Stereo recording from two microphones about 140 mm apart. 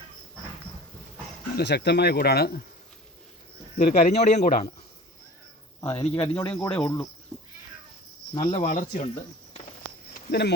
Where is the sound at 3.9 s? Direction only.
85° left.